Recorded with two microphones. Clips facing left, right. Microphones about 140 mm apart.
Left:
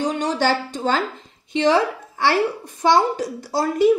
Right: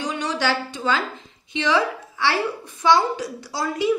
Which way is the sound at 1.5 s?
45° left (ahead or behind).